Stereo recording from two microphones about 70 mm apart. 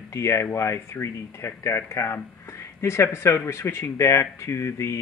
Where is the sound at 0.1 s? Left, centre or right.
Left.